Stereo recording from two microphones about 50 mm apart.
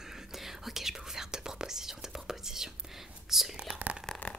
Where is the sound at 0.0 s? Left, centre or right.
Centre.